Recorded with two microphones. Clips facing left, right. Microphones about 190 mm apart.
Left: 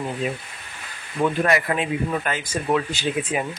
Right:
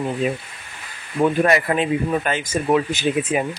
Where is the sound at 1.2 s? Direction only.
25° right (ahead or behind).